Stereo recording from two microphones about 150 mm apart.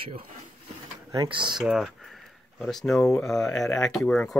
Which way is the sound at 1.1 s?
30° right (ahead or behind).